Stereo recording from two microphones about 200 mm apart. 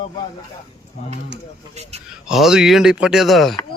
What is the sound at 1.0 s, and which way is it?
Speech, 40° left (ahead or behind).